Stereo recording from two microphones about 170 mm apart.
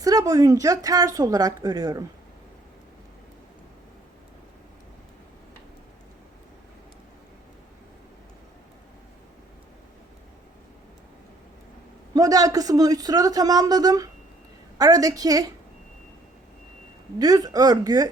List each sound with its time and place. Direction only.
0.0 s speech: 20° right (ahead or behind)
12.1 s speech: 20° right (ahead or behind)
17.2 s speech: 20° right (ahead or behind)